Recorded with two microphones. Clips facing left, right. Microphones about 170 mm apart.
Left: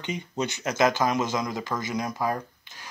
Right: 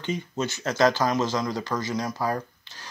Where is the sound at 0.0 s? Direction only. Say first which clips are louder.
Right 1 dB; 15° left (ahead or behind).